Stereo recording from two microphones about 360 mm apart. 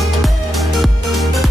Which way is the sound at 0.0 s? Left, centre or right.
Centre.